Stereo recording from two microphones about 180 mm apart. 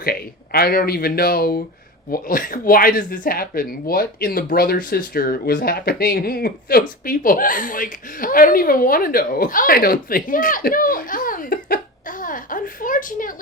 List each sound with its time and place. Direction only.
0.0 s speech: 55° left (ahead or behind)